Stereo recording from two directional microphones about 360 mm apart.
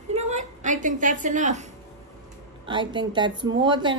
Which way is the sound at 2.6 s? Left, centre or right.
Centre.